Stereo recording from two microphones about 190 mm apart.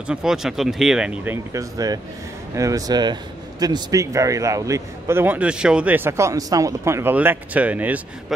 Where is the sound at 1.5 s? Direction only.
20° right (ahead or behind).